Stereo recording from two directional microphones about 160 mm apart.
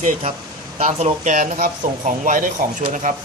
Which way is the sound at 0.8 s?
50° right (ahead or behind).